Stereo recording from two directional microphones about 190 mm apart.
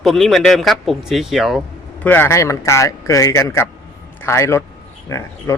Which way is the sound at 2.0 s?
10° left (ahead or behind).